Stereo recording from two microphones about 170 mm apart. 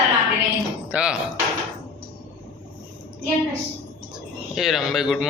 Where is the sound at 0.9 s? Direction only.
5° right (ahead or behind).